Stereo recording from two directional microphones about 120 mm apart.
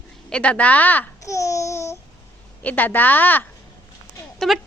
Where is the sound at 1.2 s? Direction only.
25° left (ahead or behind).